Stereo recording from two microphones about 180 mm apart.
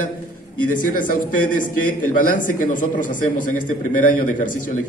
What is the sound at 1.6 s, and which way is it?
A man's voice, 50° left (ahead or behind).